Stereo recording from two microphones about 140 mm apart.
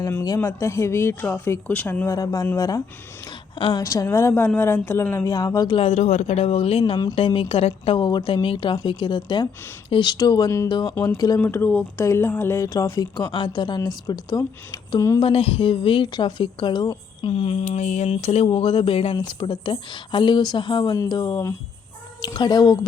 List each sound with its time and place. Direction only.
0.3 s speech: 20° left (ahead or behind)
2.1 s a woman's voice: 25° left (ahead or behind)
11.3 s speech: 15° left (ahead or behind)
15.2 s a woman's voice: 40° left (ahead or behind)